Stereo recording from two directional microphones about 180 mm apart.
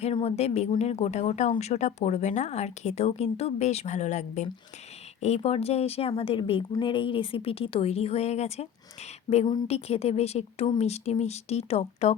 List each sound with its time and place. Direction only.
0.0 s speech: 35° left (ahead or behind)